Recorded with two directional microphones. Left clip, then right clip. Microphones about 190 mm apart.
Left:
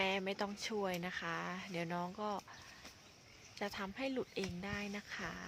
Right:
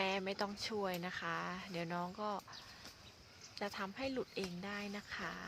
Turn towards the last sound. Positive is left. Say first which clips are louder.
# even
turn(degrees=20)  # may be behind; listen again after turning